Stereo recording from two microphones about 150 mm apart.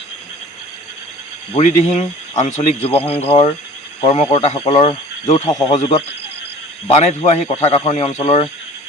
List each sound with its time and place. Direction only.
1.5 s speech: 50° left (ahead or behind)